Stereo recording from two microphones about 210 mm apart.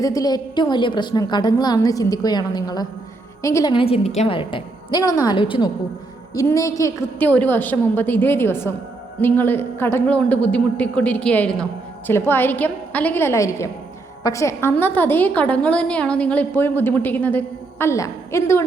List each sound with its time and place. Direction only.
0.0 s a woman's voice: 15° left (ahead or behind)